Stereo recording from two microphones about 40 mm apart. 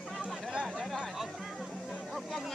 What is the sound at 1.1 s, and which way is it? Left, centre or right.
Music, centre.